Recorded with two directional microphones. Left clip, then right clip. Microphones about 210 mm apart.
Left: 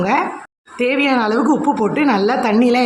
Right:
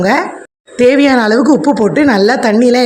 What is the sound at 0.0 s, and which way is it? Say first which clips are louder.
A woman's voice: right 5 dB; 25° right (ahead or behind).